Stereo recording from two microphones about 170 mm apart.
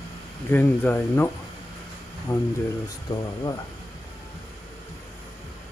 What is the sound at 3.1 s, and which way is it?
Speech, 25° left (ahead or behind).